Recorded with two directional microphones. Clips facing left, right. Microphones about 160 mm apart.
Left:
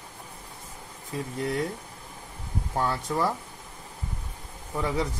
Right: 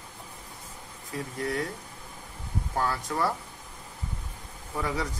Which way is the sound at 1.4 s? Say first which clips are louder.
Left 2 dB; 25° left (ahead or behind).